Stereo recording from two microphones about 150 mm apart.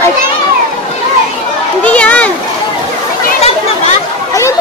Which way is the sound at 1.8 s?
10° left (ahead or behind).